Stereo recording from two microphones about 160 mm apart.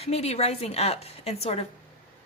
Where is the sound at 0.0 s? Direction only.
40° left (ahead or behind).